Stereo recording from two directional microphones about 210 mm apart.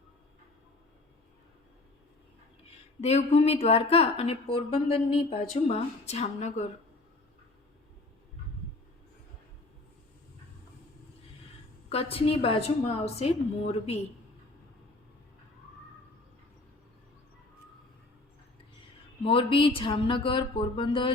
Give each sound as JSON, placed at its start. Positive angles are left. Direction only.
{"t": 2.6, "sound": "a woman's voice", "side_deg": 30}
{"t": 11.9, "sound": "a woman's voice", "side_deg": 25}
{"t": 19.2, "sound": "a woman's voice", "side_deg": 25}